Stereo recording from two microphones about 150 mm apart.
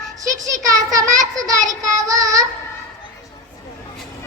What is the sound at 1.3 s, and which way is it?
Child singing, 25° right (ahead or behind).